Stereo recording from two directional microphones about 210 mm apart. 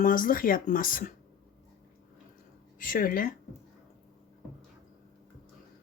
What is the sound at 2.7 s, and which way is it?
Speech, 40° left (ahead or behind).